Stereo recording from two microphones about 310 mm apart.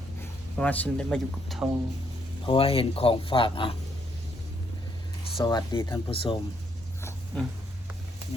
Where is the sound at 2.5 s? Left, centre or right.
Centre.